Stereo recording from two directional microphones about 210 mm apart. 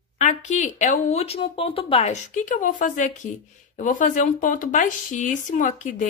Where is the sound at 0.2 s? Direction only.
35° left (ahead or behind).